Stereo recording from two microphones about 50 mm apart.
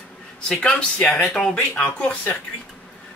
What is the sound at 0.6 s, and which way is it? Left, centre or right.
Speech, centre.